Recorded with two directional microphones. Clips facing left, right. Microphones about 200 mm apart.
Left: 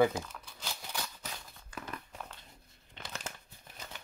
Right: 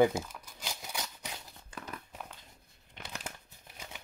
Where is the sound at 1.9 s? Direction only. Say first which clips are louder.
Right 1 dB; 10° right (ahead or behind).